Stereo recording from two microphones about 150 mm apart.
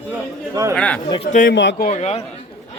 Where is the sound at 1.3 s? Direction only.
70° left (ahead or behind).